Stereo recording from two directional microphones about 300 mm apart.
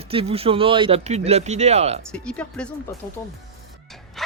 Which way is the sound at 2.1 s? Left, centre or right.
Centre.